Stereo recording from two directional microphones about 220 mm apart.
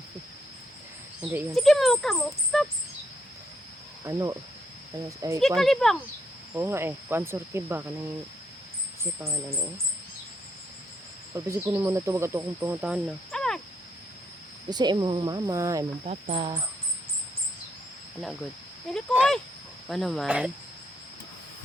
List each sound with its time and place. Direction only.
1.2 s speech: 5° right (ahead or behind)
4.0 s speech: 15° right (ahead or behind)
5.4 s speech: centre (ahead or behind)
6.5 s speech: 10° right (ahead or behind)
11.4 s speech: 10° right (ahead or behind)
14.7 s speech: 20° right (ahead or behind)
16.0 s speech: 30° right (ahead or behind)
18.9 s speech: centre (ahead or behind)